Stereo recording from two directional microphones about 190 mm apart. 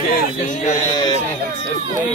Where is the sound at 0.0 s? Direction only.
40° left (ahead or behind).